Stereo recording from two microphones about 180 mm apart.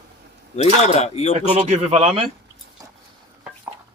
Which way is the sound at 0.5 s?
35° left (ahead or behind).